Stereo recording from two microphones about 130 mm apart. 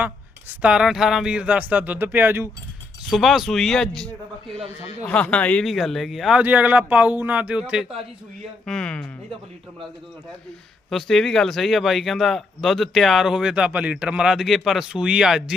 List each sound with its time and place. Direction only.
0.6 s speech: 5° right (ahead or behind)
3.1 s speech: centre (ahead or behind)
6.4 s speech: 10° right (ahead or behind)
8.6 s speech: 5° left (ahead or behind)
10.8 s speech: 5° left (ahead or behind)